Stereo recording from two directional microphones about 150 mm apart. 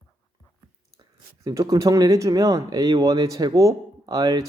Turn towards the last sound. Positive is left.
turn(degrees=-25)  # may be behind; listen again after turning